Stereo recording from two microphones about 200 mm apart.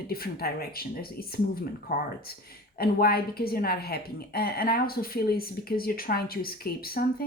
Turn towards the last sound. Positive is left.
turn(degrees=50)  # may be behind; listen again after turning